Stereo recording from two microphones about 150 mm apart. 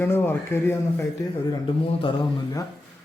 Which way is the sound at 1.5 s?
35° left (ahead or behind).